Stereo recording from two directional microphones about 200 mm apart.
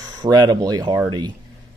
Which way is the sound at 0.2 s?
20° right (ahead or behind).